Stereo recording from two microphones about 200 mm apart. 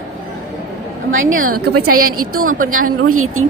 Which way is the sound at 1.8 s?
90° right.